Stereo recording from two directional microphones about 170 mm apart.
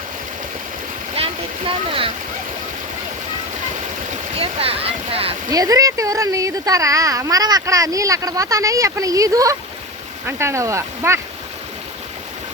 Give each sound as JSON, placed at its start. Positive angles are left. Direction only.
{"t": 1.1, "sound": "stream", "side_deg": -35}
{"t": 4.1, "sound": "speech", "side_deg": -35}
{"t": 5.5, "sound": "speech", "side_deg": -20}